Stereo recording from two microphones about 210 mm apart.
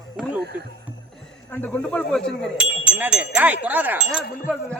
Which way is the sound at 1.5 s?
5° left (ahead or behind).